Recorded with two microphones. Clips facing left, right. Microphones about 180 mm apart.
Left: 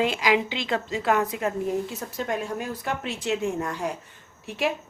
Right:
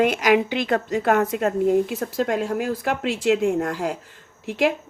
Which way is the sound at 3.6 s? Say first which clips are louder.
Right 5 dB; 85° right.